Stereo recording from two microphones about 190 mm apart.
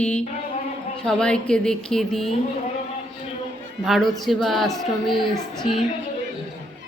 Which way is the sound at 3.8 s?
Centre (ahead or behind).